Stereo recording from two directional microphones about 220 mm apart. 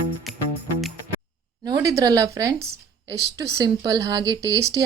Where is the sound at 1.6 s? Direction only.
15° right (ahead or behind).